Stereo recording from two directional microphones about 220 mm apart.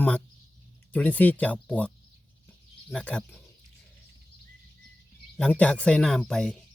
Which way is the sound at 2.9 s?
5° left (ahead or behind).